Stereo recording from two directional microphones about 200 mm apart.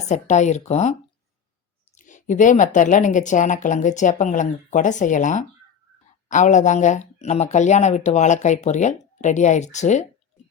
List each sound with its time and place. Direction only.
0.1 s speech: 35° left (ahead or behind)
2.0 s speech: 40° left (ahead or behind)